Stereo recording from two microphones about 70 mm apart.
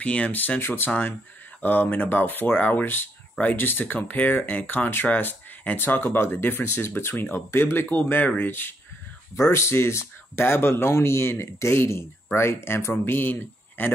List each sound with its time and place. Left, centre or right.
0.0 s speech: centre
9.3 s speech: left